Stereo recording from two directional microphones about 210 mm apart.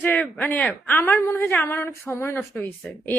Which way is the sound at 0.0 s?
10° left (ahead or behind).